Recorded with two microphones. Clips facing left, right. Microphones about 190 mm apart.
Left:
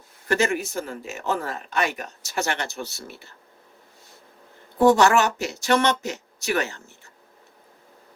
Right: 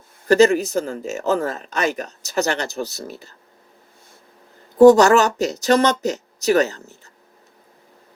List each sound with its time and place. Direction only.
0.3 s speech: 40° right (ahead or behind)
4.8 s speech: 40° right (ahead or behind)